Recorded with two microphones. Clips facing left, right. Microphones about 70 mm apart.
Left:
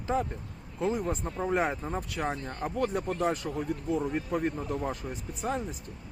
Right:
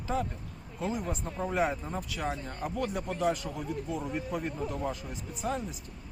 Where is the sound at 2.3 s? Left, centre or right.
Left.